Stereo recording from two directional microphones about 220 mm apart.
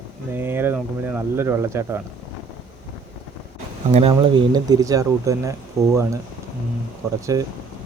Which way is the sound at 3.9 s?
25° right (ahead or behind).